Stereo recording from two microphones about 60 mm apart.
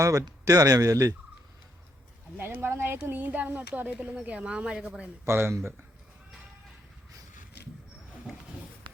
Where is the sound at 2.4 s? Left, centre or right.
Right; by 5.0 s centre.